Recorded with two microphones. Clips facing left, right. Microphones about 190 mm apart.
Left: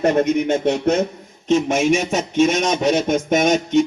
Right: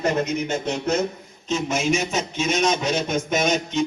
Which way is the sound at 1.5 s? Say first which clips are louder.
Left 6 dB; 50° left (ahead or behind).